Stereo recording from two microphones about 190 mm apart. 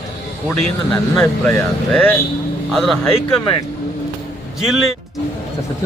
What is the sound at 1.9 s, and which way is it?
A man's voice, 10° left (ahead or behind).